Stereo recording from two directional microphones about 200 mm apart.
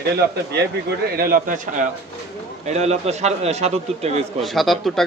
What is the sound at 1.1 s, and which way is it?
Speech, 45° right (ahead or behind).